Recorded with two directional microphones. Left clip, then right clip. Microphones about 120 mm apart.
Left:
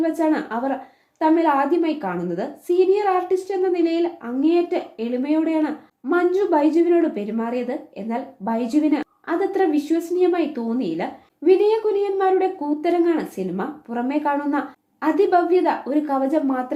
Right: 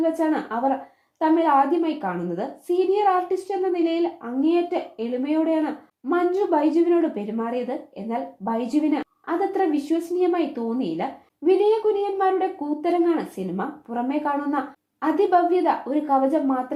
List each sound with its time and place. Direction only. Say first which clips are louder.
0.0 s a woman's voice: left 2 dB; 20° right (ahead or behind)